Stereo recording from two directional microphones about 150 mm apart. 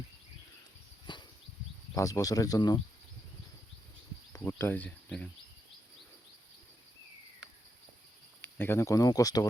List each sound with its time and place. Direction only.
1.1 s a sound: 30° left (ahead or behind)
2.0 s speech: 20° left (ahead or behind)
4.3 s speech: 15° left (ahead or behind)
8.4 s speech: 15° left (ahead or behind)